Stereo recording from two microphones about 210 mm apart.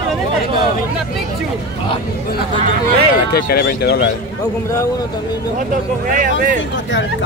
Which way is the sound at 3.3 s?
45° left (ahead or behind).